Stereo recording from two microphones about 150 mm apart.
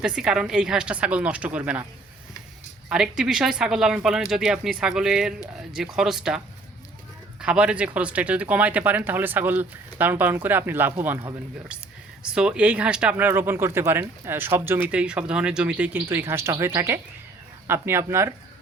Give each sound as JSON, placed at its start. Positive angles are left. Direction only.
{"t": 0.0, "sound": "speech", "side_deg": -5}
{"t": 2.9, "sound": "speech", "side_deg": -5}
{"t": 7.4, "sound": "speech", "side_deg": -5}
{"t": 12.2, "sound": "speech", "side_deg": -5}